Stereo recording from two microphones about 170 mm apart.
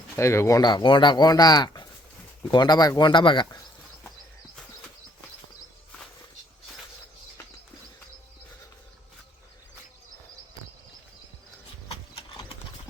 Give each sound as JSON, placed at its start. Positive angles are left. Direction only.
{"t": 0.2, "sound": "speech", "side_deg": 15}